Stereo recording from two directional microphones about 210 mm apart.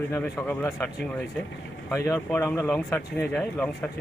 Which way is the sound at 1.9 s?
10° left (ahead or behind).